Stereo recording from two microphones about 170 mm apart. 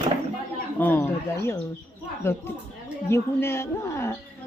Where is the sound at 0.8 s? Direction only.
10° left (ahead or behind).